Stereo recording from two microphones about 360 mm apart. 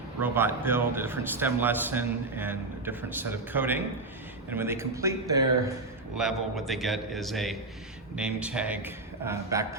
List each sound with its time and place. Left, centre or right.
0.2 s a man's voice: centre